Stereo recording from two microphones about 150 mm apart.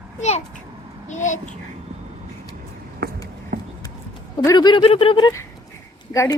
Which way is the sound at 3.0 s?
90° right.